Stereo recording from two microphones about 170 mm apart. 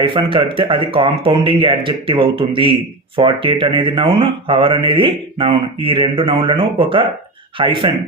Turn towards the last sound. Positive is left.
turn(degrees=-30)  # may be behind; listen again after turning